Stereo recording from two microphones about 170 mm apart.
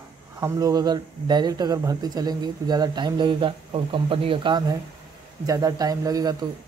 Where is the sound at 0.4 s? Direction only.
20° right (ahead or behind).